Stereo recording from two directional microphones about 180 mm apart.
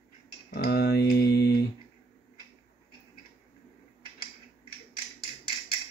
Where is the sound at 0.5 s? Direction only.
60° left (ahead or behind).